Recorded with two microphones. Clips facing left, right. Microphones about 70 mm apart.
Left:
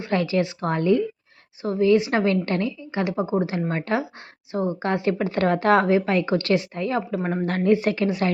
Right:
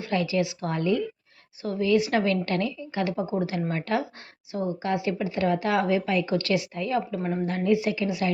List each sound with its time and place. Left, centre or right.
0.0 s a woman's voice: left
4.5 s a woman's voice: left
7.4 s a woman's voice: left